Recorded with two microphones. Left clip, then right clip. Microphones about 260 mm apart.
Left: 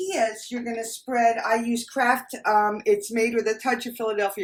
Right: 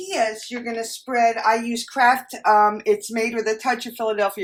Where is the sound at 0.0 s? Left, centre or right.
Centre.